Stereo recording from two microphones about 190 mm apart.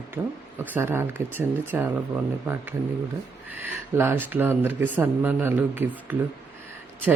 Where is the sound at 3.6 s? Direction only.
10° right (ahead or behind).